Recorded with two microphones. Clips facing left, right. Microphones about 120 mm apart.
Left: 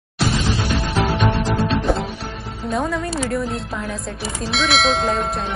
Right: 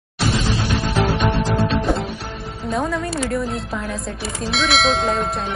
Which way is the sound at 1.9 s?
Centre (ahead or behind).